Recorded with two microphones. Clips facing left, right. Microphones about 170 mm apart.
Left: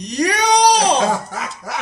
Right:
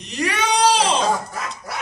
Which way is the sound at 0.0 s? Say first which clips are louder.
Left 5 dB; 40° left (ahead or behind).